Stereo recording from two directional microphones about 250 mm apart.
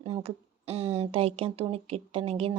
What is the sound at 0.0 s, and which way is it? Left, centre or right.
Speech, right.